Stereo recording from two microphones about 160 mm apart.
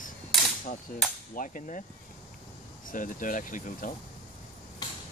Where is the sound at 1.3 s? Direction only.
55° left (ahead or behind).